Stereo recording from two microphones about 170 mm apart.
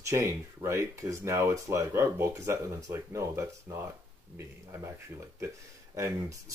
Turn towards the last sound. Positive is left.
turn(degrees=-20)  # may be behind; listen again after turning